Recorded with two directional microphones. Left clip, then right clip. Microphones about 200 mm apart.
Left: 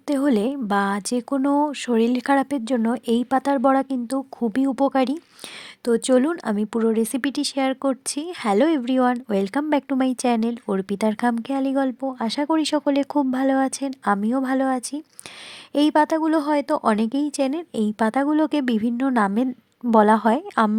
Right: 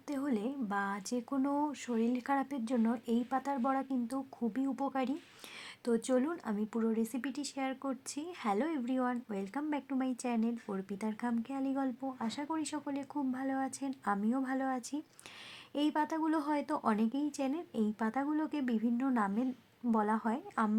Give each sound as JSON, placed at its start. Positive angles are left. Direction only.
{"t": 0.1, "sound": "a woman's voice", "side_deg": 40}